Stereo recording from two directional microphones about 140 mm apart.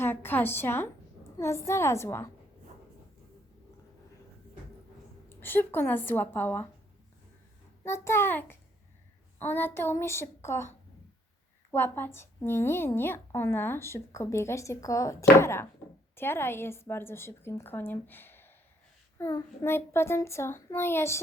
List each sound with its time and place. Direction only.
0.0 s a sound: 15° left (ahead or behind)
1.4 s a child's voice: 20° left (ahead or behind)
5.4 s a woman's voice: 15° left (ahead or behind)
7.9 s a woman's voice: 20° left (ahead or behind)